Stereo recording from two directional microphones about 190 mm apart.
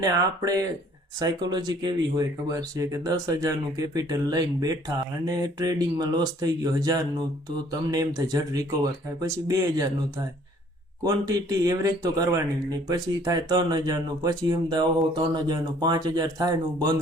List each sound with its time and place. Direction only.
0.0 s speech: 20° right (ahead or behind)
11.0 s speech: 20° right (ahead or behind)